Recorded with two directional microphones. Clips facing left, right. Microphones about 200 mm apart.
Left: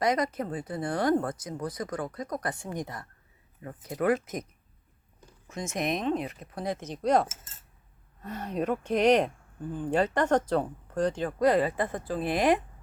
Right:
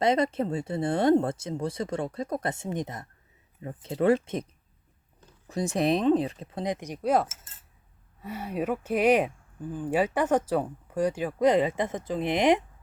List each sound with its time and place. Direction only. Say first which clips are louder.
0.0 s speech: right 3 dB; 25° right (ahead or behind)
5.5 s speech: right 6 dB; 35° right (ahead or behind); by 11.3 s 10° right (ahead or behind)
11.3 s speech: right 2 dB; 20° right (ahead or behind)